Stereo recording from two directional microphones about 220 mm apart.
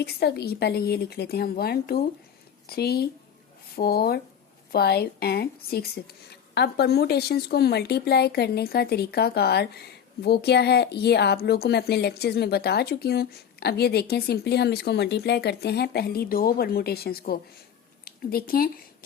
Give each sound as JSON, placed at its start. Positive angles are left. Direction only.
{"t": 0.0, "sound": "speech", "side_deg": 45}